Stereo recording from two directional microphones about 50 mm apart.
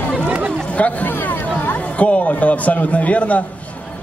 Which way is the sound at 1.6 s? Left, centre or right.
Left.